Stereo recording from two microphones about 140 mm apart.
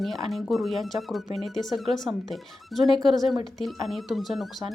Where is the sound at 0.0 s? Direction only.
Centre (ahead or behind).